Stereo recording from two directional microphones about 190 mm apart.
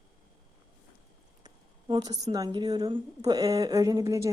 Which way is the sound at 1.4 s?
20° right (ahead or behind).